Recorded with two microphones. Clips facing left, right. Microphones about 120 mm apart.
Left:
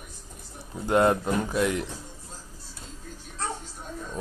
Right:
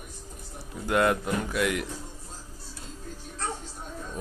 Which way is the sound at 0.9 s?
25° left (ahead or behind).